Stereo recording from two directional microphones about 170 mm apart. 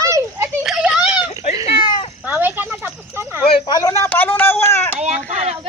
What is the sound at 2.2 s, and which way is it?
Snake, 10° right (ahead or behind).